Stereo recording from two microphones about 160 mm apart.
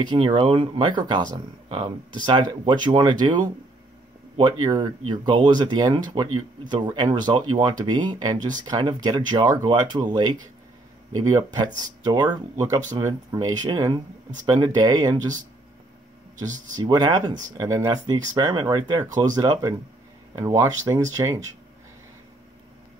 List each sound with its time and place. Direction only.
0.0 s speech: 30° right (ahead or behind)
16.7 s speech: 25° right (ahead or behind)